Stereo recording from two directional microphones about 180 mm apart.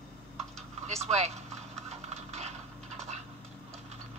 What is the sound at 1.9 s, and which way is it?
Horse, 35° right (ahead or behind).